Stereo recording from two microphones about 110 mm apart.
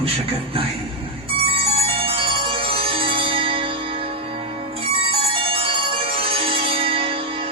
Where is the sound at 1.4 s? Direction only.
55° right (ahead or behind).